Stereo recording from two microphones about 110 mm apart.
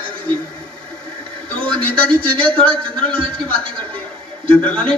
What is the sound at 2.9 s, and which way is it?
A man's voice, 10° left (ahead or behind).